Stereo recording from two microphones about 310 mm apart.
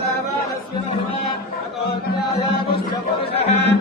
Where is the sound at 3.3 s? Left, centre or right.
Centre.